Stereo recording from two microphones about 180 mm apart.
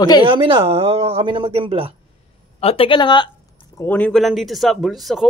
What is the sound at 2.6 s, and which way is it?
Speech, 30° left (ahead or behind).